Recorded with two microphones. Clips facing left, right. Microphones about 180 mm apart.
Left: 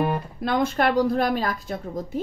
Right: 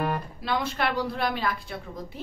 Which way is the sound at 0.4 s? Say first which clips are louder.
Left 7 dB; 50° left (ahead or behind).